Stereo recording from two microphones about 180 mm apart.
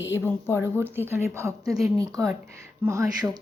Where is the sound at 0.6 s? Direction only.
15° right (ahead or behind).